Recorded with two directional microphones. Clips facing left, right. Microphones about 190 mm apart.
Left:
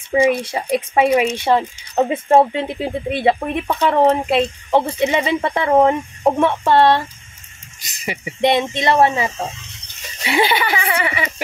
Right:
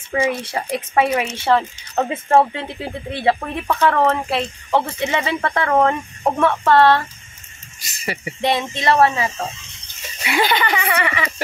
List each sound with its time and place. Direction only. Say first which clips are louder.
0.1 s speech: left 5 dB; 15° left (ahead or behind)
10.4 s speech: even; 10° left (ahead or behind)